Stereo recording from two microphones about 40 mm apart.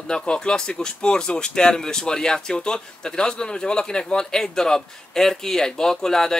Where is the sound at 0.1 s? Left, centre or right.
Left.